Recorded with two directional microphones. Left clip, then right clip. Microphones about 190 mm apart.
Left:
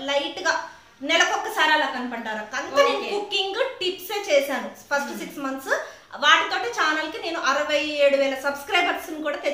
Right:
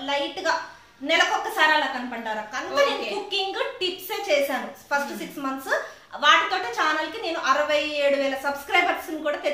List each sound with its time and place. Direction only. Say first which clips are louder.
0.0 s a woman's voice: left 2 dB; 20° left (ahead or behind)